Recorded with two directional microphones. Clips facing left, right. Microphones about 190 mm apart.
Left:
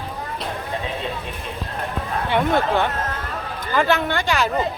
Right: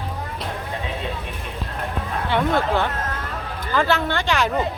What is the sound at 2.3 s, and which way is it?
Speech, 20° left (ahead or behind).